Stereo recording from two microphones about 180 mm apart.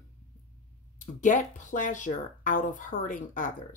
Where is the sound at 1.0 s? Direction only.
45° left (ahead or behind).